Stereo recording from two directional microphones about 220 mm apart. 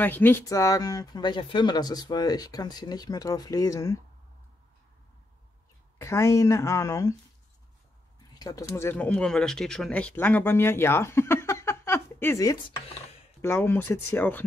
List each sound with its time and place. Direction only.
0.0 s speech: 10° left (ahead or behind)
5.9 s speech: 15° left (ahead or behind)
8.4 s speech: 15° left (ahead or behind)